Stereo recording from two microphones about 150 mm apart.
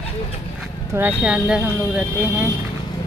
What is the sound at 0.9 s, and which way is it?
Speech, 10° right (ahead or behind).